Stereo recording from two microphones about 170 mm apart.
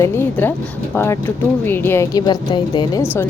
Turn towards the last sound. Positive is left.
turn(degrees=25)  # may be behind; listen again after turning